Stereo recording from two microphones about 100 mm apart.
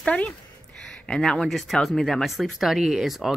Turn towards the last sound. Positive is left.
turn(degrees=0)  # may be behind; listen again after turning